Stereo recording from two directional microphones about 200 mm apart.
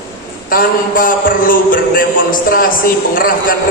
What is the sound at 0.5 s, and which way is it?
A man's voice, 45° left (ahead or behind).